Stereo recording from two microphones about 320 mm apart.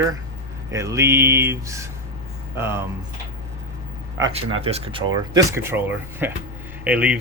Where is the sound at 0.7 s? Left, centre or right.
Centre.